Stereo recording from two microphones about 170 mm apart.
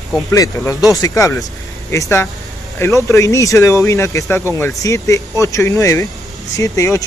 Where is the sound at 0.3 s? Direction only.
20° left (ahead or behind).